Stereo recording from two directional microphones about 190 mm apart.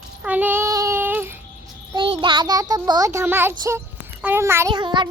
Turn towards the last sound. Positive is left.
turn(degrees=-25)  # may be behind; listen again after turning